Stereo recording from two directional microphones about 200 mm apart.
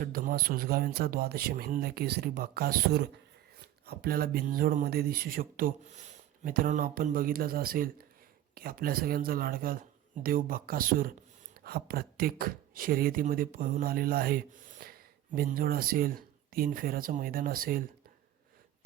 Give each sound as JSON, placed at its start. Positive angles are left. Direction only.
{"t": 0.0, "sound": "speech", "side_deg": -45}